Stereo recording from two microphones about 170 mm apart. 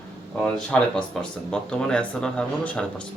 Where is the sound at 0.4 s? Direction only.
5° left (ahead or behind).